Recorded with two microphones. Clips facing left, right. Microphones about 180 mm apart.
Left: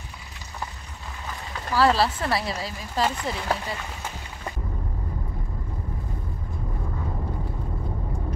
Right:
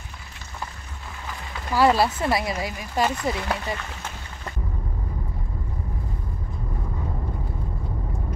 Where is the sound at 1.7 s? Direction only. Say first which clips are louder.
Right 2 dB; 15° right (ahead or behind).